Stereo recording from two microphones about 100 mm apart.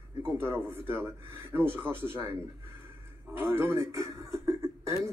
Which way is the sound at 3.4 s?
25° right (ahead or behind).